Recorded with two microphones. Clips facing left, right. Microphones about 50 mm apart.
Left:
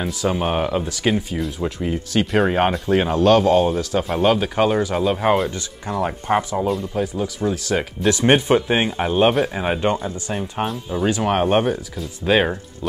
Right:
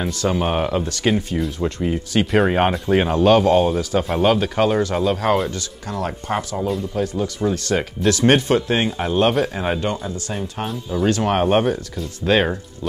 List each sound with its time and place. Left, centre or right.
0.0 s speech: centre
8.1 s speech: centre